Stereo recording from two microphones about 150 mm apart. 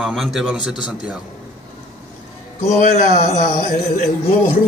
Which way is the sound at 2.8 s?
50° left (ahead or behind).